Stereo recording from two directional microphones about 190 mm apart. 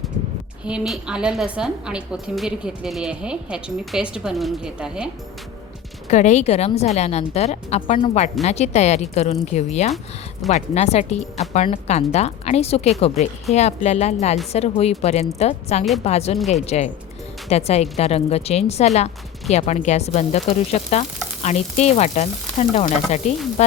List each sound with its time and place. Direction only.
0.6 s a woman's voice: 5° right (ahead or behind)
6.1 s a woman's voice: 40° left (ahead or behind)